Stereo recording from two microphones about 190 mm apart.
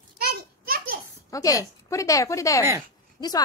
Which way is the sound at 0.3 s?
55° right (ahead or behind).